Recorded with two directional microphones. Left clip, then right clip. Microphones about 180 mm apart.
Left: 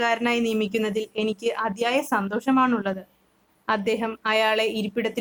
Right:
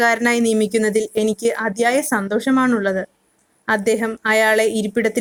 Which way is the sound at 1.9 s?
30° right (ahead or behind).